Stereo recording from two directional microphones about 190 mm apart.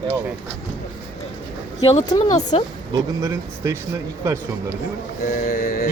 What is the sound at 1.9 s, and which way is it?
Speech, 25° left (ahead or behind).